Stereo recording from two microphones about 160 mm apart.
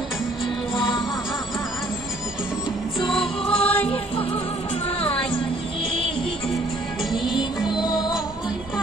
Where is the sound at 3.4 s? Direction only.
35° left (ahead or behind).